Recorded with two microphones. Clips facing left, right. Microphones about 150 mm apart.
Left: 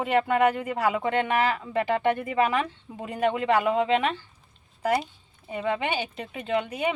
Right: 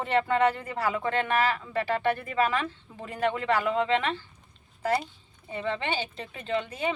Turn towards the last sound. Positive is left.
turn(degrees=15)  # may be behind; listen again after turning